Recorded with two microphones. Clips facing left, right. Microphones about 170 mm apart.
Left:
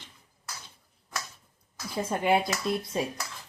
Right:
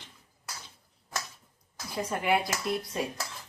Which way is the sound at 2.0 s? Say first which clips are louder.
Left 3 dB; 25° left (ahead or behind).